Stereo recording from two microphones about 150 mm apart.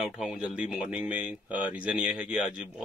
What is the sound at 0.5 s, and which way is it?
Speech, 10° right (ahead or behind).